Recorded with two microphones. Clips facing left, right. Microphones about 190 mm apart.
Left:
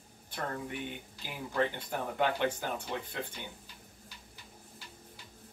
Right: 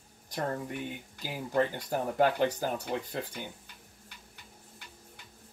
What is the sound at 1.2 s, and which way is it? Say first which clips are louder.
Speech: right 3 dB; 40° right (ahead or behind).